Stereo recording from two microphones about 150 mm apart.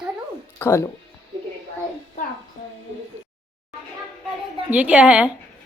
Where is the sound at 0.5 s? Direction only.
15° left (ahead or behind).